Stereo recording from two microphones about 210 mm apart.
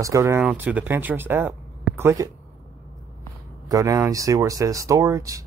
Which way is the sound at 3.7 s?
15° right (ahead or behind).